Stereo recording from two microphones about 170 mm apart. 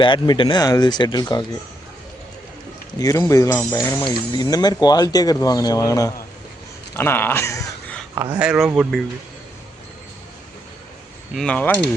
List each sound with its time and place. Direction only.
0.0 s speech: 30° left (ahead or behind)
3.0 s speech: 20° left (ahead or behind)
8.1 s speech: 15° right (ahead or behind)
11.3 s speech: 5° left (ahead or behind)